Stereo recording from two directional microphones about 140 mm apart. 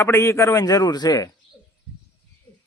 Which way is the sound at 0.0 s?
20° left (ahead or behind).